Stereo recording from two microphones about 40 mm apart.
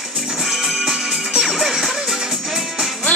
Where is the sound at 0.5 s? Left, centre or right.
Centre.